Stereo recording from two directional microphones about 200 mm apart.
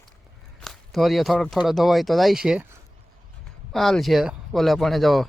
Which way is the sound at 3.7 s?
Centre (ahead or behind).